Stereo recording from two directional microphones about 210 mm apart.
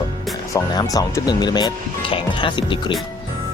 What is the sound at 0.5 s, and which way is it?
Speech, 15° left (ahead or behind).